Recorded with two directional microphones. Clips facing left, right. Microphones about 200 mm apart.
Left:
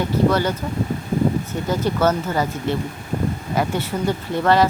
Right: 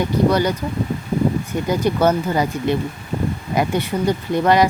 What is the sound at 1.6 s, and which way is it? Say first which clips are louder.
Speech: right 2 dB; 15° right (ahead or behind).